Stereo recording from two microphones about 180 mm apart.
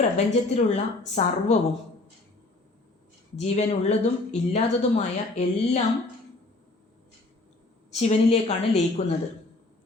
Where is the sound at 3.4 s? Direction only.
35° left (ahead or behind).